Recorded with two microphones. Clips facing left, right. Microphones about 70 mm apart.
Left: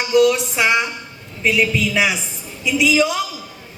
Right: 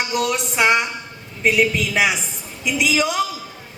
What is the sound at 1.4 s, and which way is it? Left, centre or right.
Speech, right.